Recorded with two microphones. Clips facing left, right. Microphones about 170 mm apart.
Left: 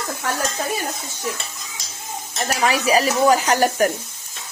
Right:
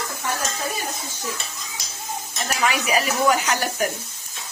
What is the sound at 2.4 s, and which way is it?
Speech, 35° left (ahead or behind).